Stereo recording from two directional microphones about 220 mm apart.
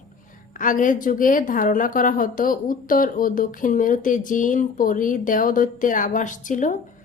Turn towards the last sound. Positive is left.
turn(degrees=35)  # may be behind; listen again after turning